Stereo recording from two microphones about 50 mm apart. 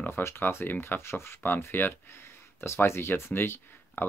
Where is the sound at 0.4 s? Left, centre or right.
Left.